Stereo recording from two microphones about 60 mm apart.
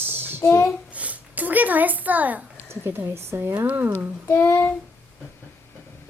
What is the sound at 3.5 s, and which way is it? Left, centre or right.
Speech, right.